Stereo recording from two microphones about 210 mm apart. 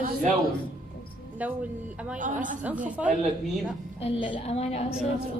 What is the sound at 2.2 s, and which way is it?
Speech, 35° right (ahead or behind).